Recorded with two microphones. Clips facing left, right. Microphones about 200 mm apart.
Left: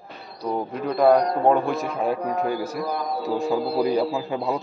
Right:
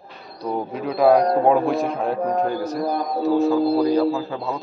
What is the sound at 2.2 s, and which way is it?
Speech, 50° right (ahead or behind).